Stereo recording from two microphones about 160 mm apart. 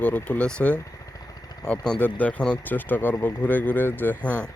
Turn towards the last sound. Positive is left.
turn(degrees=10)  # may be behind; listen again after turning